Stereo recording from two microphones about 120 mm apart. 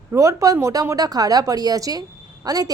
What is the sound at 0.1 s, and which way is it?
A woman's voice, 25° right (ahead or behind).